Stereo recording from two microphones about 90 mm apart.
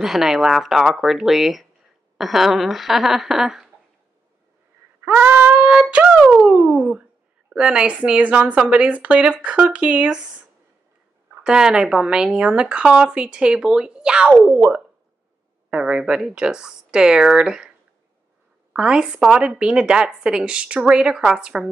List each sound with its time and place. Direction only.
0.0 s speech: 5° right (ahead or behind)
5.2 s speech: 15° right (ahead or behind)
11.4 s speech: 5° right (ahead or behind)
14.5 s speech: 20° right (ahead or behind)
15.7 s speech: 10° right (ahead or behind)